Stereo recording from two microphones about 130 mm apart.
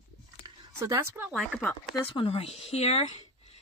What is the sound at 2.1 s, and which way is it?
Speech, 45° left (ahead or behind).